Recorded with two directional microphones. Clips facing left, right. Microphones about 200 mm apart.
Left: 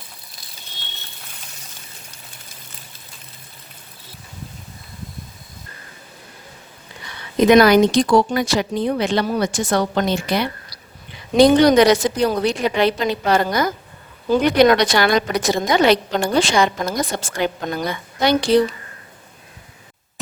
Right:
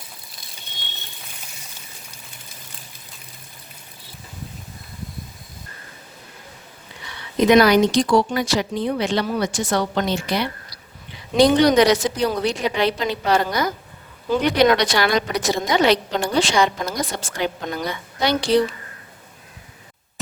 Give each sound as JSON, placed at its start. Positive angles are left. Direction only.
{"t": 7.0, "sound": "a woman's voice", "side_deg": 50}